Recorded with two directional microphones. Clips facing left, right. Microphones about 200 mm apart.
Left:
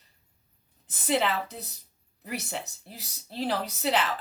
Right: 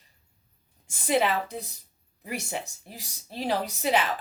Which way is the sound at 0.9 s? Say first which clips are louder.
Right 2 dB; 10° right (ahead or behind).